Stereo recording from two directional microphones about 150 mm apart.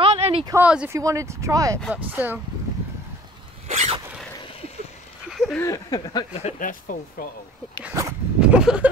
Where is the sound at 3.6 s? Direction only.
45° right (ahead or behind).